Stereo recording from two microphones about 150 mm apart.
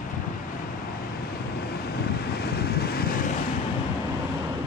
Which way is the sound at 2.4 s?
90° left.